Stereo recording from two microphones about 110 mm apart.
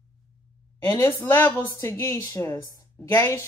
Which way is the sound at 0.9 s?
20° left (ahead or behind).